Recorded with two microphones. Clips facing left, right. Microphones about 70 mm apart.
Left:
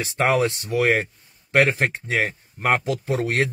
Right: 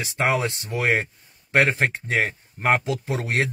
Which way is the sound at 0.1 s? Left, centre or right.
Right.